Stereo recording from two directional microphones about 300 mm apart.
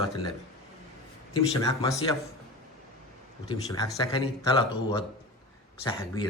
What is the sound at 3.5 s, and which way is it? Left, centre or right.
Speech, centre.